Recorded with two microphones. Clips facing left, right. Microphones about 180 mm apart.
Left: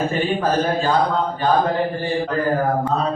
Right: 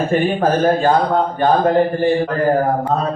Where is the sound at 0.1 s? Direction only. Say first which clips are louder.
Right 4 dB; 55° right (ahead or behind).